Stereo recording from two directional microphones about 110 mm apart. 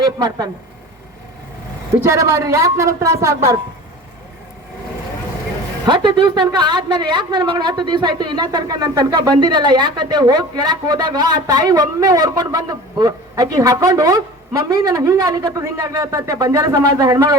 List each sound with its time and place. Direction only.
0.0 s a man's voice: 35° right (ahead or behind)
2.0 s a woman's voice: 25° right (ahead or behind)
5.8 s a man's voice: 45° right (ahead or behind)